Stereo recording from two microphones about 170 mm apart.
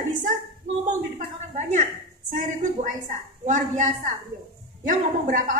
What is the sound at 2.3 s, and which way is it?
Speech, 50° right (ahead or behind).